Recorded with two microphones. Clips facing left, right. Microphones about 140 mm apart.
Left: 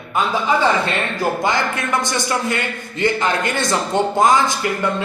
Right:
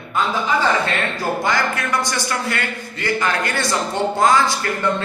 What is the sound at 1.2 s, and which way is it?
A man's voice, 20° left (ahead or behind).